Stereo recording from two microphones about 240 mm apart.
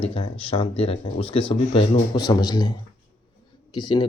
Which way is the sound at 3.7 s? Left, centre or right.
Centre.